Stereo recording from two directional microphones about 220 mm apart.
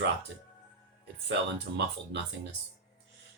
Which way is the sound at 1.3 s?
50° right (ahead or behind).